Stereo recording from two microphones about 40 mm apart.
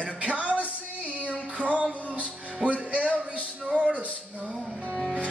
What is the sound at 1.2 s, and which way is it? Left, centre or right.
Female singing, right.